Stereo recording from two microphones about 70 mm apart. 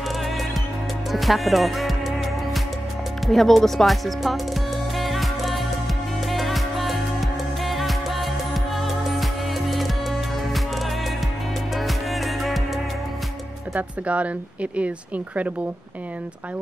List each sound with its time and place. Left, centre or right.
1.1 s music: centre
3.3 s speech: centre
4.9 s music: centre
13.7 s speech: centre